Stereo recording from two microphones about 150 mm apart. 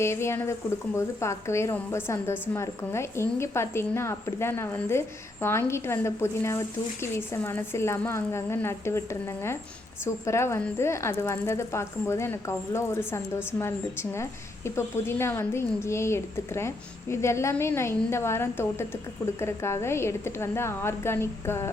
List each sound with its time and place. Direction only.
0.0 s a woman's voice: 15° left (ahead or behind)